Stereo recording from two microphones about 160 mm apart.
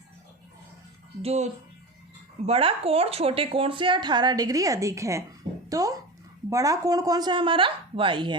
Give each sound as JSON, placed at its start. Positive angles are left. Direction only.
{"t": 1.2, "sound": "speech", "side_deg": -40}
{"t": 2.5, "sound": "speech", "side_deg": -35}